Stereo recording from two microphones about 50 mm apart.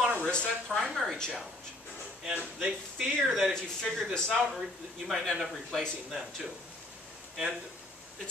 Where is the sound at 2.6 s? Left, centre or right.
Centre.